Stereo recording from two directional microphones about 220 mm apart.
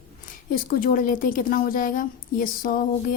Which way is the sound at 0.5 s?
40° left (ahead or behind).